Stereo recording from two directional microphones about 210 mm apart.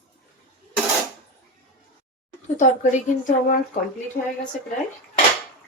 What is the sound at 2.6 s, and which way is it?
A woman's voice, 35° left (ahead or behind).